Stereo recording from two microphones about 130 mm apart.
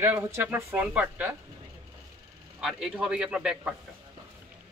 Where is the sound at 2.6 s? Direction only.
5° right (ahead or behind).